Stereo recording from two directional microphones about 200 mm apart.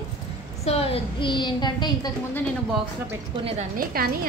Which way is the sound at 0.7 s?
30° left (ahead or behind).